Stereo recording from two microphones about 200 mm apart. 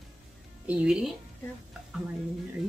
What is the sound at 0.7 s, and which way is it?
Speech, 5° right (ahead or behind).